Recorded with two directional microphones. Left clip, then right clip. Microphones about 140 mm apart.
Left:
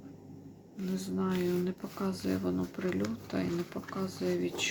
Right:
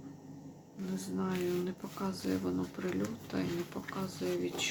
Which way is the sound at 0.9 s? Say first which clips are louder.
Left 3 dB; 20° left (ahead or behind).